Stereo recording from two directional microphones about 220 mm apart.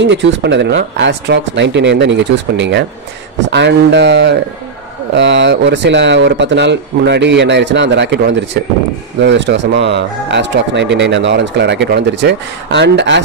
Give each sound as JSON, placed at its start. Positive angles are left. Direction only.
{"t": 0.0, "sound": "speech", "side_deg": -55}